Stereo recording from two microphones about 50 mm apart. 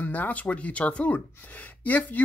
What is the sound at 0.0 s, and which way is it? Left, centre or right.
Speech, left.